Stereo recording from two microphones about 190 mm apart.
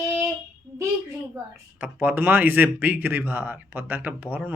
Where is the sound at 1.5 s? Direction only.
10° right (ahead or behind).